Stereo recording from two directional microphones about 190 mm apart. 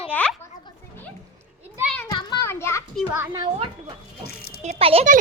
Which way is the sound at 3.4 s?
25° right (ahead or behind).